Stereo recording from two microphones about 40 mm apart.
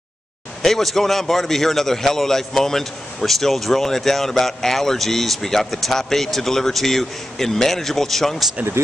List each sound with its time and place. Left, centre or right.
0.6 s a man's voice: centre
8.8 s speech: right